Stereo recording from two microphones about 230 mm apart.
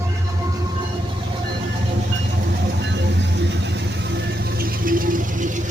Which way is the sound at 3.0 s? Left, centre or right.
Right.